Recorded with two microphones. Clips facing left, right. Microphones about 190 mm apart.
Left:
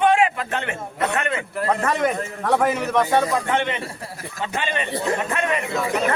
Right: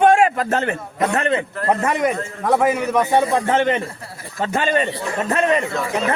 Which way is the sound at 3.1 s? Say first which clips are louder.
Right 2 dB; 20° right (ahead or behind).